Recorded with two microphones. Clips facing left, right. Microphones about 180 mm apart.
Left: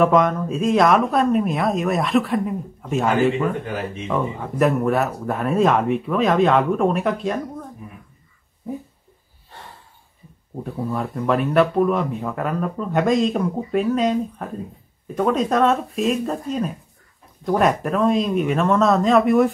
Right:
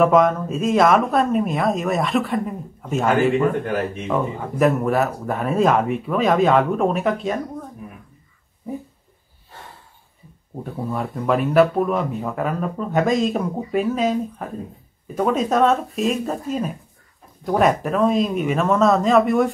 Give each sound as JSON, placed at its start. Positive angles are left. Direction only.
{"t": 0.0, "sound": "speech", "side_deg": 0}
{"t": 10.6, "sound": "speech", "side_deg": 0}